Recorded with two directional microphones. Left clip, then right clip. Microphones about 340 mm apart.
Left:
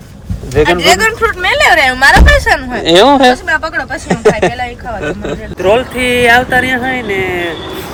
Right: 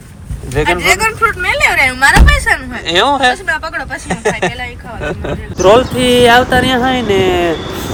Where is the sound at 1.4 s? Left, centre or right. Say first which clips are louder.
Left 6 dB; centre.